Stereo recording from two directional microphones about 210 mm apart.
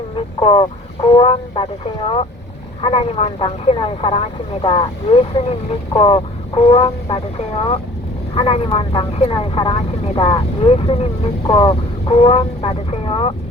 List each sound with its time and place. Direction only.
0.3 s speech: 20° left (ahead or behind)